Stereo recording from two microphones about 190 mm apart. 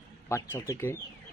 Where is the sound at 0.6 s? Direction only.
15° left (ahead or behind).